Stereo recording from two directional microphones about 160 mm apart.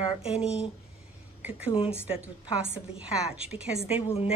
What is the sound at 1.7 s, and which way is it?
Speech, 35° left (ahead or behind).